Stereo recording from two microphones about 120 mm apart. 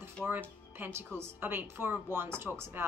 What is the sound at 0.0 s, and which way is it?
Speech, 15° right (ahead or behind).